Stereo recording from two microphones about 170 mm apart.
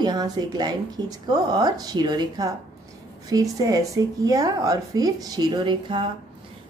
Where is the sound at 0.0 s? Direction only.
25° right (ahead or behind).